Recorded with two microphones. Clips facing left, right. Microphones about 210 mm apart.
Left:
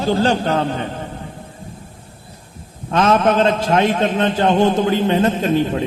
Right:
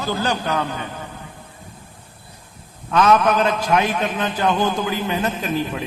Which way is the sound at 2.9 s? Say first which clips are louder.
Left 1 dB; 30° left (ahead or behind).